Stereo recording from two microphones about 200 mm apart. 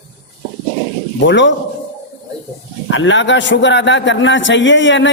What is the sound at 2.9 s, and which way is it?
A man's voice, 70° left (ahead or behind).